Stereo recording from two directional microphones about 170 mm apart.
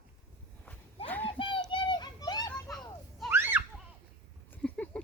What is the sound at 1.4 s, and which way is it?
Children playing, 30° left (ahead or behind).